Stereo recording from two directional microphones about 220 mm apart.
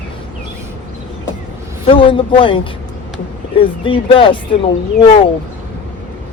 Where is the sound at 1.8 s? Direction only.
25° left (ahead or behind).